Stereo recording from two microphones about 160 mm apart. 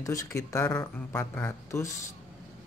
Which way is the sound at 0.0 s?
20° left (ahead or behind).